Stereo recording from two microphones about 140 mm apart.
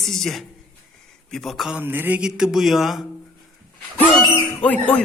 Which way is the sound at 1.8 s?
15° right (ahead or behind).